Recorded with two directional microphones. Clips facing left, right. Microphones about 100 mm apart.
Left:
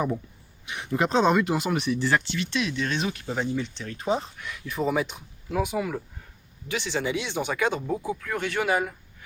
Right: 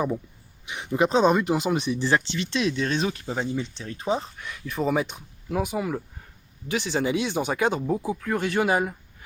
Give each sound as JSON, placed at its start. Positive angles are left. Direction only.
{"t": 0.6, "sound": "speech", "side_deg": -20}
{"t": 7.9, "sound": "speech", "side_deg": -10}
{"t": 8.2, "sound": "speech", "side_deg": -30}